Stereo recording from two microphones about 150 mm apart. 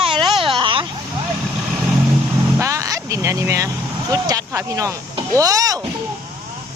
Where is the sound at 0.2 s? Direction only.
35° right (ahead or behind).